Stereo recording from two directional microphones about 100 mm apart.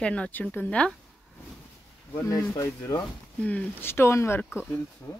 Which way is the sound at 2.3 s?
35° left (ahead or behind).